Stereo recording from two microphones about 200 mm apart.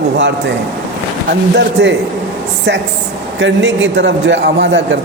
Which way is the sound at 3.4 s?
60° right (ahead or behind).